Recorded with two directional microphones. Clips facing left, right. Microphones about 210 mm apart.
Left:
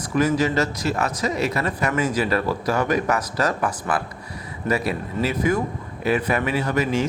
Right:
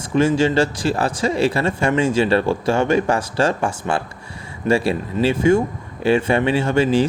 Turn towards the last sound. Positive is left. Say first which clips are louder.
# right 5 dB
turn(degrees=-30)  # may be behind; listen again after turning